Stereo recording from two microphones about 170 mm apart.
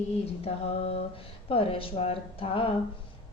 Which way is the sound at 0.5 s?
35° left (ahead or behind).